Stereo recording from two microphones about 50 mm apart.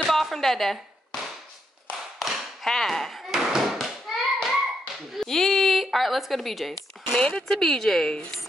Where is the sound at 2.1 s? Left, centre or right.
Centre.